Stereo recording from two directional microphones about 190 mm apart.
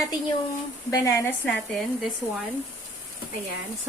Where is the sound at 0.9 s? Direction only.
15° left (ahead or behind).